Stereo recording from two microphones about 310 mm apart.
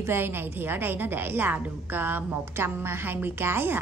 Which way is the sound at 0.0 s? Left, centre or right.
Centre.